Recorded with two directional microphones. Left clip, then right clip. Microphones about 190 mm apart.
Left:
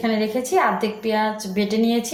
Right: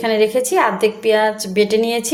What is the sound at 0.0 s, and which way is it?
A woman's voice, 50° right (ahead or behind).